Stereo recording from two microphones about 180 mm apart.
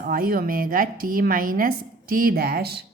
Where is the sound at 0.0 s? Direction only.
55° right (ahead or behind).